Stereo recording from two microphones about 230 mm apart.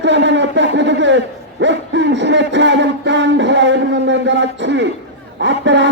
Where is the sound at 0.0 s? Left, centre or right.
Right.